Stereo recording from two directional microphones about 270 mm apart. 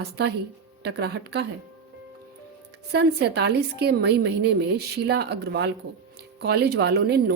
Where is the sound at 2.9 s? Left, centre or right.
Right.